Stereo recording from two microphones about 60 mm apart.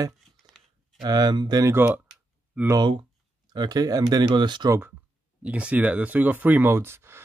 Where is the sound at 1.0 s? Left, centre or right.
Right.